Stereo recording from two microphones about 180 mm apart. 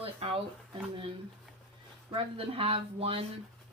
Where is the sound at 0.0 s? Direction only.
30° right (ahead or behind).